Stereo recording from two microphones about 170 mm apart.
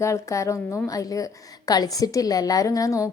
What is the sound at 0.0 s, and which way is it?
A woman's voice, 15° left (ahead or behind).